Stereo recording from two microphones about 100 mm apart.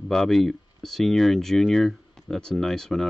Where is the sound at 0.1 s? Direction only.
Centre (ahead or behind).